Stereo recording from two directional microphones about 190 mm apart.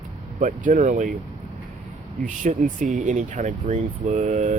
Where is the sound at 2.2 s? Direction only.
40° right (ahead or behind).